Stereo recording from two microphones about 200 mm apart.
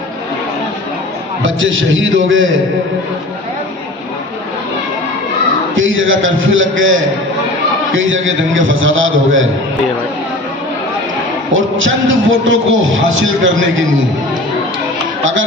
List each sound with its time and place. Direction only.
1.4 s a man's voice: 75° right (ahead or behind)
5.7 s a man's voice: 75° right (ahead or behind)
11.5 s a man's voice: 75° right (ahead or behind)
15.2 s speech: 70° right (ahead or behind)